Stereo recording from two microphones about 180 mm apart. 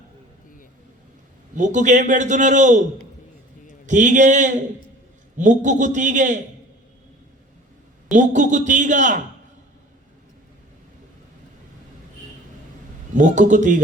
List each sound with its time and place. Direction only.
1.5 s a man's voice: 45° right (ahead or behind)
3.8 s a man's voice: 45° right (ahead or behind)
8.1 s a man's voice: 45° right (ahead or behind)
13.1 s a man's voice: 45° right (ahead or behind)